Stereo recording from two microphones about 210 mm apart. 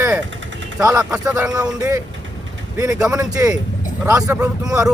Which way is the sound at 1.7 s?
15° right (ahead or behind).